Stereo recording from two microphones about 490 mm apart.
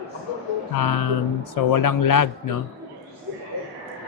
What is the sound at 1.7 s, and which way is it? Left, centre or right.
Speech, left.